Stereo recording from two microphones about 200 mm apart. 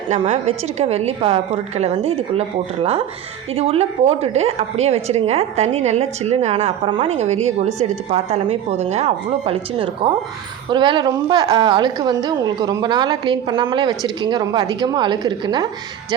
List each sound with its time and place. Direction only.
0.1 s a woman's voice: 35° right (ahead or behind)
3.5 s a woman's voice: 30° right (ahead or behind)